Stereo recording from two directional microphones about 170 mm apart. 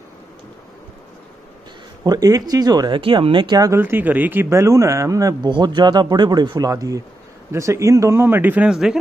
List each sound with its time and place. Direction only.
2.0 s speech: 20° right (ahead or behind); by 8.9 s 5° right (ahead or behind)